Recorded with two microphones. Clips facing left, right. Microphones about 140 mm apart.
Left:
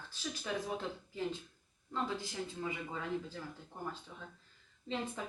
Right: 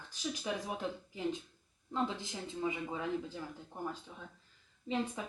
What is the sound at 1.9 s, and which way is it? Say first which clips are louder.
Speech: right 2 dB; 20° right (ahead or behind).